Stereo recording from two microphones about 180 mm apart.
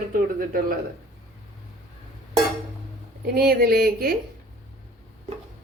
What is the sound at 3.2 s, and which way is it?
Speech, 60° right (ahead or behind).